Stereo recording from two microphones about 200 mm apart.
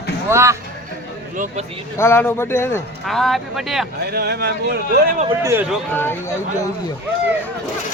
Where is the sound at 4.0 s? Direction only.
50° right (ahead or behind).